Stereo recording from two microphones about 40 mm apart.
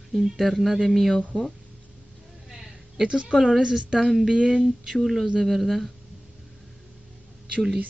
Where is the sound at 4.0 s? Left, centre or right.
Centre.